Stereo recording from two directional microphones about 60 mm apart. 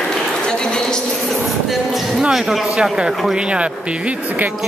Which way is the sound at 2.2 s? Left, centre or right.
Centre.